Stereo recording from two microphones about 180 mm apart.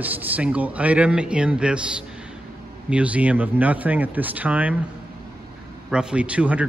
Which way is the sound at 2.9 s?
5° right (ahead or behind).